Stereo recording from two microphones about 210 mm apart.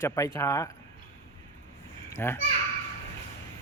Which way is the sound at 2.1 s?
15° left (ahead or behind).